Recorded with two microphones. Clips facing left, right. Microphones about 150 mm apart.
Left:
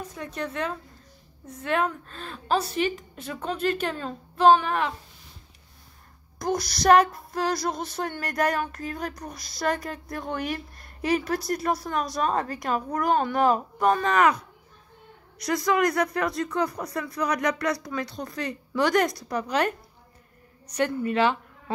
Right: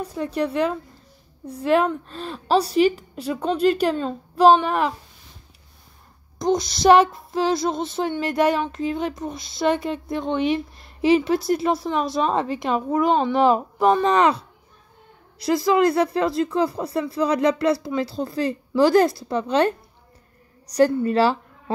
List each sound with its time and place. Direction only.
0.0 s a woman's voice: 30° right (ahead or behind)
6.5 s female singing: centre (ahead or behind)
10.3 s speech: centre (ahead or behind)
11.8 s female singing: centre (ahead or behind)
14.0 s a woman's voice: 30° right (ahead or behind)